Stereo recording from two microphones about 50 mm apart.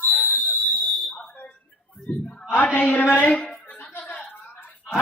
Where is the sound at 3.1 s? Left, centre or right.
Left.